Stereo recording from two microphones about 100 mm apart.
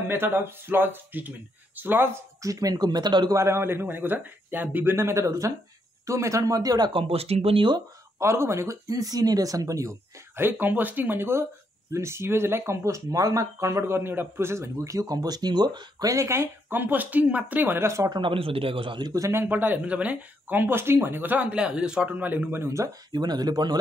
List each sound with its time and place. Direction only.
0.1 s speech: 20° right (ahead or behind)
2.4 s speech: 35° right (ahead or behind)
3.3 s speech: 25° right (ahead or behind)
6.9 s speech: 70° right (ahead or behind)
8.2 s speech: 25° right (ahead or behind)
18.1 s a man's voice: 60° right (ahead or behind)
19.1 s speech: 35° right (ahead or behind)
19.4 s speech: 15° right (ahead or behind)
23.1 s speech: 45° right (ahead or behind)